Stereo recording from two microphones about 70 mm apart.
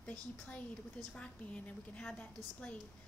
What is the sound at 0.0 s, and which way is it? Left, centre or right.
A woman's voice, centre.